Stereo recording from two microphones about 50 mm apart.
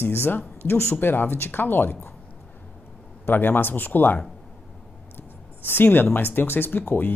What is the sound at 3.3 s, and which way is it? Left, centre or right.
Speech, left.